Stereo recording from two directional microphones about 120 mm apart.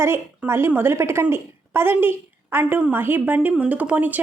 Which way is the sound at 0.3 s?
20° right (ahead or behind).